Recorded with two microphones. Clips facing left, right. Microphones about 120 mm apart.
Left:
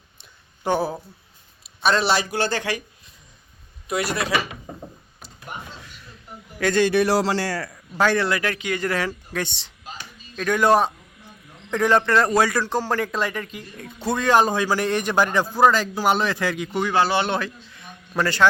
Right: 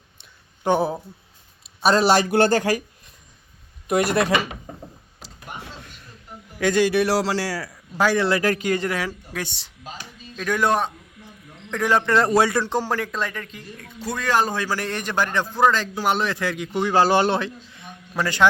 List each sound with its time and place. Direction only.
0.7 s a man's voice: 20° right (ahead or behind)
1.9 s speech: 40° right (ahead or behind)
3.8 s speech: 50° right (ahead or behind)
6.6 s a man's voice: 10° right (ahead or behind)
8.2 s a man's voice: 30° right (ahead or behind)
8.8 s a man's voice: 10° right (ahead or behind)
12.0 s a man's voice: 20° right (ahead or behind)
12.9 s speech: centre (ahead or behind)
13.7 s a man's voice: 25° left (ahead or behind); by 16.8 s centre (ahead or behind)
16.9 s a man's voice: 40° right (ahead or behind)
17.3 s a man's voice: 25° right (ahead or behind)